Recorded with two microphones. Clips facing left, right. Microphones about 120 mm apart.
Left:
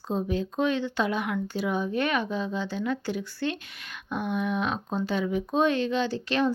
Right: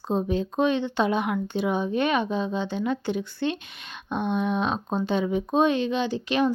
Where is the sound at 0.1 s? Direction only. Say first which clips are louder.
Right 3 dB; 25° right (ahead or behind).